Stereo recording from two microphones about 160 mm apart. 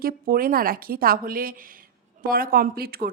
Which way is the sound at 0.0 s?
65° right (ahead or behind).